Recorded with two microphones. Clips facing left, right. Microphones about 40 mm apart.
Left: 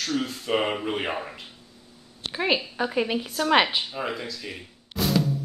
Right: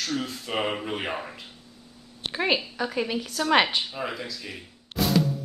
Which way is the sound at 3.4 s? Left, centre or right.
Centre.